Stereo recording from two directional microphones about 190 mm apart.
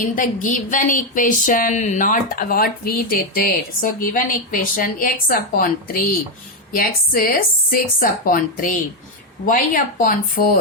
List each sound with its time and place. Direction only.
0.2 s speech: 45° left (ahead or behind)